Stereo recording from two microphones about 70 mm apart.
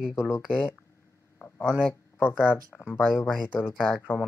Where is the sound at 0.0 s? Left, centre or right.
Centre.